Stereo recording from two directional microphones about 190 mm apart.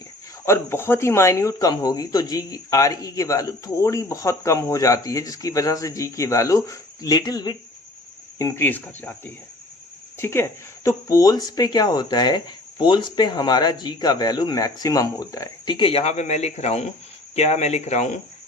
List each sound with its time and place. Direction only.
0.4 s speech: 15° left (ahead or behind); by 18.2 s 40° left (ahead or behind)